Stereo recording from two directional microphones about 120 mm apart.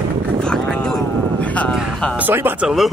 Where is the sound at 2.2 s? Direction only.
15° right (ahead or behind).